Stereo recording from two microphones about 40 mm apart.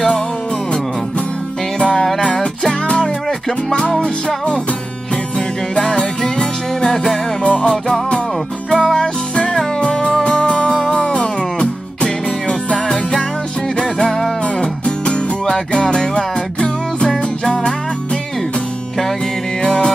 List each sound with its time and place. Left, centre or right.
1.8 s music: left
5.8 s music: centre
7.4 s music: left
8.6 s music: centre
19.6 s music: left